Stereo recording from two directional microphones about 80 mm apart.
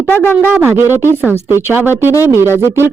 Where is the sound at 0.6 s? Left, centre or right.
Right.